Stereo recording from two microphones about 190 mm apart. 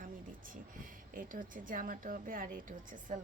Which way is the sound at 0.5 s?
45° right (ahead or behind).